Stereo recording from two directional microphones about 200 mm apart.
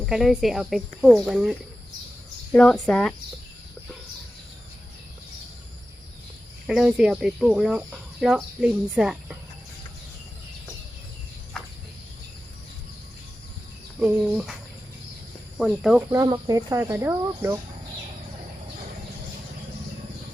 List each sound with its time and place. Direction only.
0.0 s speech: centre (ahead or behind)
6.7 s speech: 5° right (ahead or behind)
14.0 s speech: 5° right (ahead or behind)
15.5 s speech: 5° right (ahead or behind)
16.1 s speech: 20° right (ahead or behind)